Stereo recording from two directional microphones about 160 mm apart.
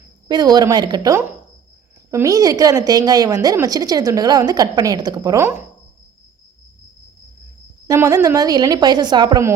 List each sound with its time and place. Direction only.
0.3 s a woman's voice: 25° right (ahead or behind)
7.9 s a woman's voice: 20° right (ahead or behind)